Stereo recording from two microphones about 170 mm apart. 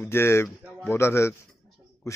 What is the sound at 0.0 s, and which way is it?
A man's voice, 15° left (ahead or behind).